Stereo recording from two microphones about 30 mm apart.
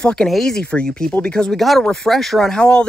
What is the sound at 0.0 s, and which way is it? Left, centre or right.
Speech, left.